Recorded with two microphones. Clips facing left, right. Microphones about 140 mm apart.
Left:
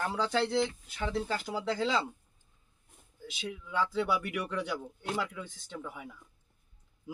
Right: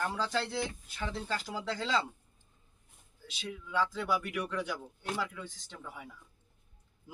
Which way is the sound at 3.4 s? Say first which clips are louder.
Even; 10° left (ahead or behind).